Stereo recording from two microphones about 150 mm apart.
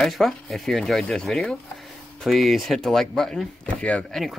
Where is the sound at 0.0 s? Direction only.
Centre (ahead or behind).